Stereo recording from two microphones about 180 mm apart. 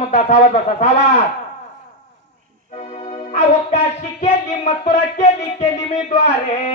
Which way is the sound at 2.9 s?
35° left (ahead or behind).